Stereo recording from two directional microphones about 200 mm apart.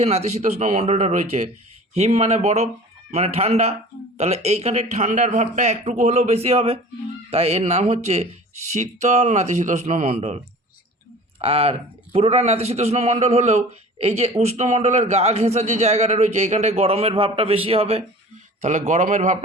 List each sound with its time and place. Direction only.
0.0 s a man's voice: 30° right (ahead or behind)